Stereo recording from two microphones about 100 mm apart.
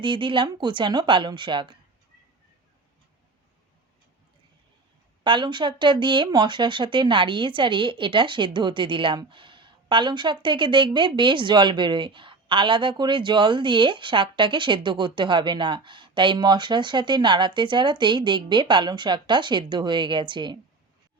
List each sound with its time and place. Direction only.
0.0 s speech: 55° right (ahead or behind)
5.2 s speech: 55° right (ahead or behind)